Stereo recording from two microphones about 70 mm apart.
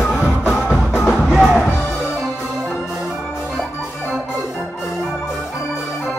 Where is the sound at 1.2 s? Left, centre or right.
Centre.